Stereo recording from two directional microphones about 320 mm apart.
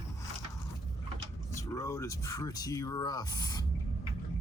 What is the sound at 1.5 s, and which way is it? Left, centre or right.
Speech, centre.